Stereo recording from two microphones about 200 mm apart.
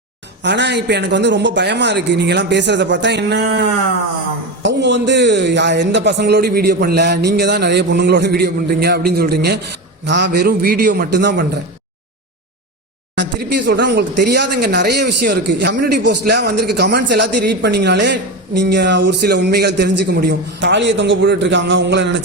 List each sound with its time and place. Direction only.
0.4 s speech: 60° right (ahead or behind)
13.1 s speech: 60° right (ahead or behind)